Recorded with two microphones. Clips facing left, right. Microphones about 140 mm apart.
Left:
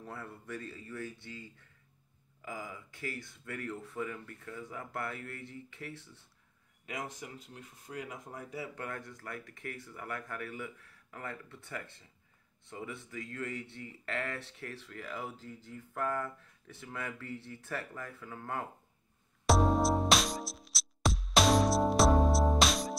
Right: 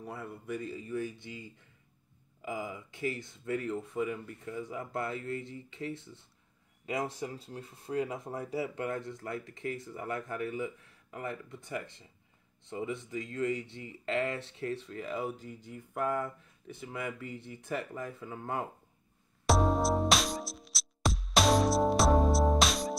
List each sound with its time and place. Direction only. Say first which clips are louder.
0.0 s speech: right 3 dB; 10° right (ahead or behind)
19.4 s music: even; centre (ahead or behind)